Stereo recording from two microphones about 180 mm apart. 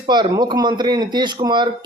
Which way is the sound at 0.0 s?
25° right (ahead or behind).